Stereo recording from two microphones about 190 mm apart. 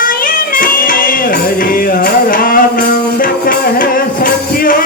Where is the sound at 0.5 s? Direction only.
45° left (ahead or behind).